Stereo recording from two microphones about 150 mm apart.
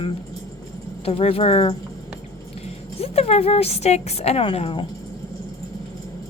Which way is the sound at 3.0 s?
40° left (ahead or behind).